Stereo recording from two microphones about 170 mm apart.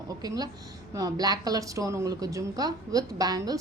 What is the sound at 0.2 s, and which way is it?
A woman's voice, 25° right (ahead or behind).